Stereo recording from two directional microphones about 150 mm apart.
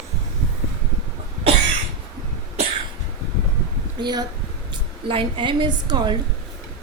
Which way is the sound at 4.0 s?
30° right (ahead or behind).